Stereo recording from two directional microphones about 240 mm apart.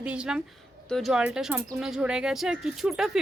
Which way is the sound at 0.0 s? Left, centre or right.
Centre.